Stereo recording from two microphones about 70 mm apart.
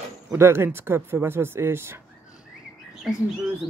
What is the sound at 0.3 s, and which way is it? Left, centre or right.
Speech, right.